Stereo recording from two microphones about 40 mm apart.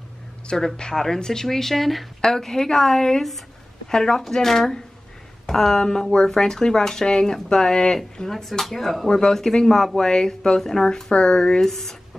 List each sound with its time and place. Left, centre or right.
0.5 s speech: centre
11.1 s speech: left
11.6 s speech: centre